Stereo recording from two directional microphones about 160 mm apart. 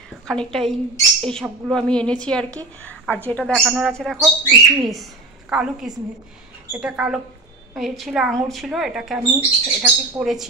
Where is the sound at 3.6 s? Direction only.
5° right (ahead or behind).